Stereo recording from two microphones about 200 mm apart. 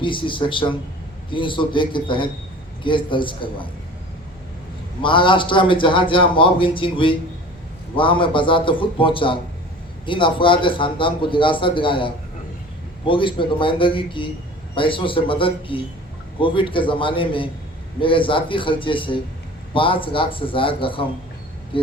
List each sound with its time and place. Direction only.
0.0 s a man's voice: 25° left (ahead or behind)
5.0 s a man's voice: 25° left (ahead or behind)